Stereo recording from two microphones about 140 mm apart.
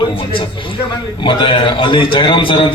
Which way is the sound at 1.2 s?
35° left (ahead or behind).